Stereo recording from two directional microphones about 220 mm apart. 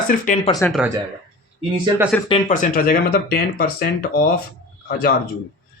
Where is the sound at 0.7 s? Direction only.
5° right (ahead or behind).